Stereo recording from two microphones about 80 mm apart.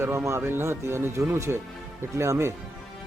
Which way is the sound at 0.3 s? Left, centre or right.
Right.